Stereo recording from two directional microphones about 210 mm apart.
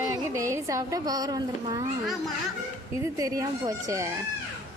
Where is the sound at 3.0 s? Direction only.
15° right (ahead or behind).